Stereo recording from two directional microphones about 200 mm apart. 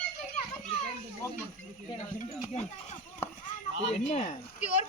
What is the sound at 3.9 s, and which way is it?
Speech, 30° left (ahead or behind).